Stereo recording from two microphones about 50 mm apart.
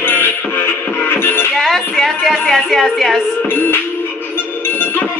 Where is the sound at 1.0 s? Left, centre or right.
Left.